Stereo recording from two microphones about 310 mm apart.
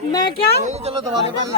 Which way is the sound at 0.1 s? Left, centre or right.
Centre.